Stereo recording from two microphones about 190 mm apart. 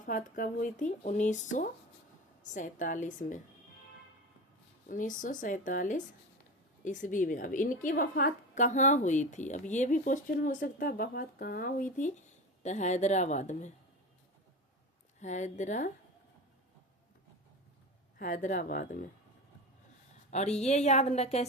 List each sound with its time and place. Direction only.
0.0 s a woman's voice: 45° left (ahead or behind)
4.9 s a woman's voice: 45° left (ahead or behind)
15.2 s speech: 40° left (ahead or behind)
18.2 s a woman's voice: 45° left (ahead or behind)
20.3 s speech: 35° left (ahead or behind)